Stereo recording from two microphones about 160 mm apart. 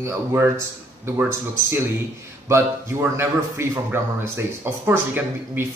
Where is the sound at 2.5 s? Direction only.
15° right (ahead or behind).